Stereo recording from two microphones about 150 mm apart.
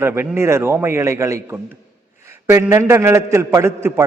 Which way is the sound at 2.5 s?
20° right (ahead or behind).